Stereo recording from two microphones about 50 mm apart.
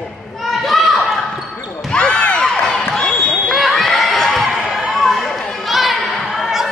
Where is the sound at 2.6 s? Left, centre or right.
Centre.